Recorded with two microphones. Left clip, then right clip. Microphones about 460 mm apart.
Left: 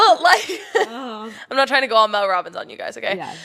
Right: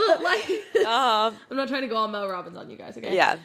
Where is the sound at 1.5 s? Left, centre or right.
Left.